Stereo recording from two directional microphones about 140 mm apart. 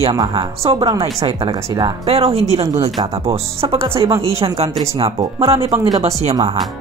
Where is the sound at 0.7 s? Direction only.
40° right (ahead or behind).